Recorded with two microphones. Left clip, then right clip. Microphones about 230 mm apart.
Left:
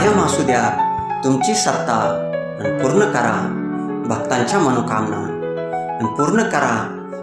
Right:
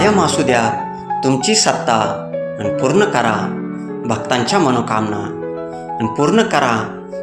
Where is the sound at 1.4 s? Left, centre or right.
Centre.